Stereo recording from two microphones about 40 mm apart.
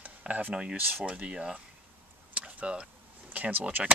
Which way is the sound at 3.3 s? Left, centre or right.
Right.